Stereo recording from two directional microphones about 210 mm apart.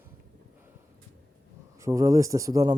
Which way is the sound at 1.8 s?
15° right (ahead or behind).